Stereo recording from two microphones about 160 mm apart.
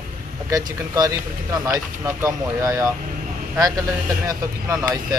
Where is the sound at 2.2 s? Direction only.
20° right (ahead or behind).